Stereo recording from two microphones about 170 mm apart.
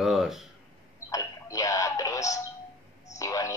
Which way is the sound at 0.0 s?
Centre (ahead or behind).